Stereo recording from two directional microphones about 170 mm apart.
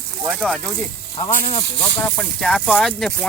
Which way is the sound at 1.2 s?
40° left (ahead or behind).